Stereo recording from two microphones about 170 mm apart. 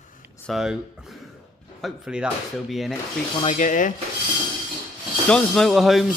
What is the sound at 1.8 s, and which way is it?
Speech, centre (ahead or behind).